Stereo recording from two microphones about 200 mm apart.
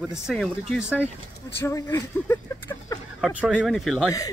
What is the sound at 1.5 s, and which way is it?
Speech, 15° left (ahead or behind).